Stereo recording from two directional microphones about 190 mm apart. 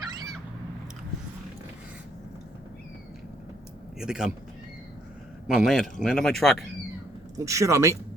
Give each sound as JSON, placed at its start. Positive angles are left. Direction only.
{"t": 4.0, "sound": "speech", "side_deg": -5}
{"t": 5.5, "sound": "speech", "side_deg": 0}
{"t": 7.3, "sound": "speech", "side_deg": -15}